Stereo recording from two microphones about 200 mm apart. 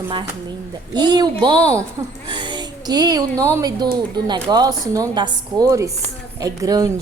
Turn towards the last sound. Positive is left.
turn(degrees=-20)  # may be behind; listen again after turning